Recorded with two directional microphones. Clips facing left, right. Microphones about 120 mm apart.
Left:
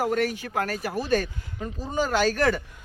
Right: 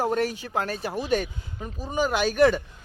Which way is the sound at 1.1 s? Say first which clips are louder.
Left 1 dB; 15° right (ahead or behind).